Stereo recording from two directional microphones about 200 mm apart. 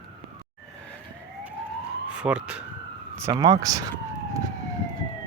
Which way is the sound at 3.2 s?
15° right (ahead or behind).